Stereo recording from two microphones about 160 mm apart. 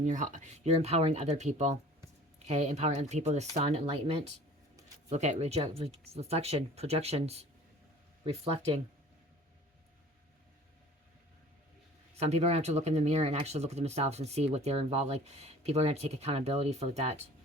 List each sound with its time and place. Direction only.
0.0 s speech: 50° right (ahead or behind)
12.1 s speech: 40° right (ahead or behind)